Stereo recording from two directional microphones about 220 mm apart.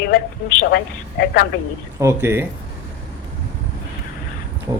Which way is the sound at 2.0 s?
15° right (ahead or behind).